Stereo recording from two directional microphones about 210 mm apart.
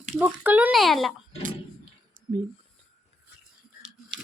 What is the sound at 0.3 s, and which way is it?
Speech, 5° right (ahead or behind).